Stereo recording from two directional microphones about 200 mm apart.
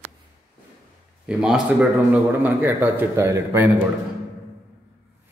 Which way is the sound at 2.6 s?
10° right (ahead or behind).